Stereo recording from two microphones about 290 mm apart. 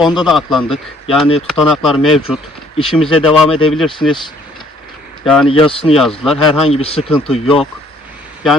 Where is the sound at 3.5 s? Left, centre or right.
Centre.